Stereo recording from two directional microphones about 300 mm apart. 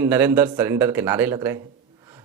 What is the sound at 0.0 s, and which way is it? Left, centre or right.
Speech, centre.